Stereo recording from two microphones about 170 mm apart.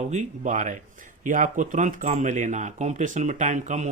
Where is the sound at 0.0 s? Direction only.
45° right (ahead or behind).